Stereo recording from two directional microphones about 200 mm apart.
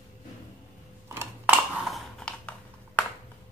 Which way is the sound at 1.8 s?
Centre (ahead or behind).